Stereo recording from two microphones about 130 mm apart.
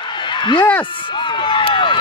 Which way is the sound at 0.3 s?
40° left (ahead or behind).